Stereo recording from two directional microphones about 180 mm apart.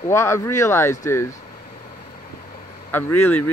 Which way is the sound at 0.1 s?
15° left (ahead or behind).